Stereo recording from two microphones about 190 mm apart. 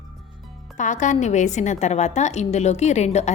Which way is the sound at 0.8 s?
40° left (ahead or behind).